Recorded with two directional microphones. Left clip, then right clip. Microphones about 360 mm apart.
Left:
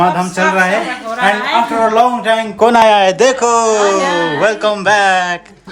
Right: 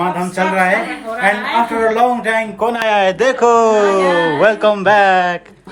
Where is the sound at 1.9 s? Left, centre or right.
Centre.